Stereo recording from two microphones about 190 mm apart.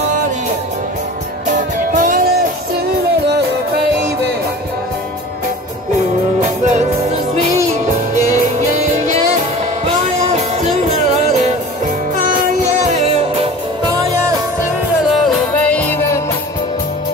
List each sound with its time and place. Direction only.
2.0 s music: 45° right (ahead or behind)
10.2 s music: 35° right (ahead or behind)
15.2 s music: 10° left (ahead or behind)